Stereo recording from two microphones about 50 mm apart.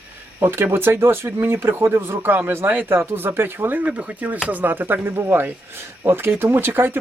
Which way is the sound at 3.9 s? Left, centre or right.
Right.